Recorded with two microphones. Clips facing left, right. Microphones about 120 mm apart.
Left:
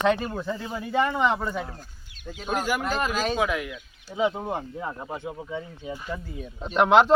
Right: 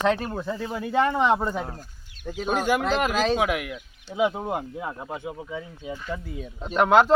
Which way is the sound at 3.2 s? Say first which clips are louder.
Right 2 dB; 75° right (ahead or behind).